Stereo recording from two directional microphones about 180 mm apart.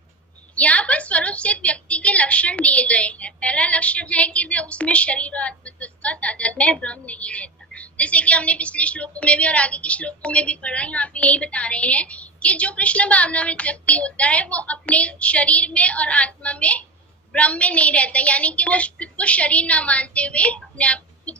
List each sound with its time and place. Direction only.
0.5 s a woman's voice: 5° left (ahead or behind)